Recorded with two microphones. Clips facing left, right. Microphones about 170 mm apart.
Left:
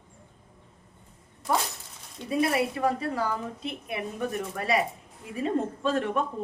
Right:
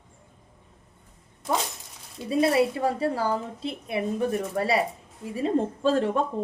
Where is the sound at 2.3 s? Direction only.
30° right (ahead or behind).